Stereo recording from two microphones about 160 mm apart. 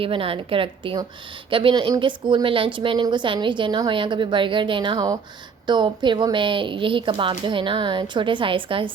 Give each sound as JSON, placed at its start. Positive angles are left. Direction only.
{"t": 0.0, "sound": "speech", "side_deg": -35}